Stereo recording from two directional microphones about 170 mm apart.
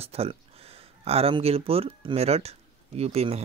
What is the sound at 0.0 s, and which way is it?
Speech, 35° right (ahead or behind).